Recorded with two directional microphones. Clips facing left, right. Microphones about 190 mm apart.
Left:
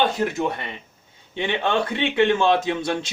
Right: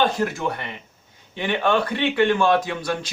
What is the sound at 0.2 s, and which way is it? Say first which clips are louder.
A man's voice: left 1 dB; 20° left (ahead or behind).